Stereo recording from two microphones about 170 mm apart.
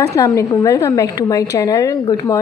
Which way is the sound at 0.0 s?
20° left (ahead or behind).